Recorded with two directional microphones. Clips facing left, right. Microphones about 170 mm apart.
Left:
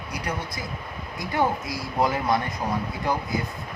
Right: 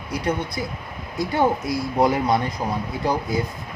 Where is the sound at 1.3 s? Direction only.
20° right (ahead or behind).